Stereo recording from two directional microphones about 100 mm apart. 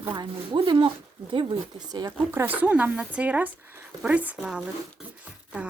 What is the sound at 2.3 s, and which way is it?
Speech, 20° right (ahead or behind).